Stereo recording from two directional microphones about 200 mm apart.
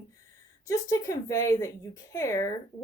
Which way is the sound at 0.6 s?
15° left (ahead or behind).